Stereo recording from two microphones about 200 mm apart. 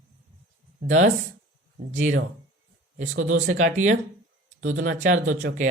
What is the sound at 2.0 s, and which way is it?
Speech, 40° right (ahead or behind).